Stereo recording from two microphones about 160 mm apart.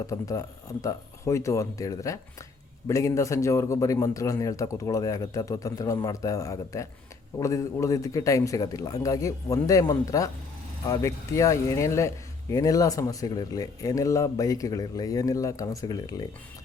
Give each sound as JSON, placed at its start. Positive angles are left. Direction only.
{"t": 0.1, "sound": "a man's voice", "side_deg": 20}